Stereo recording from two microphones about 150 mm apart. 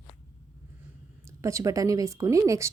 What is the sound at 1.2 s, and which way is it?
Speech, 20° right (ahead or behind).